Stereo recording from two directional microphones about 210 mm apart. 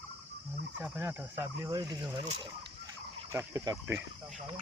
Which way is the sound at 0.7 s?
5° right (ahead or behind).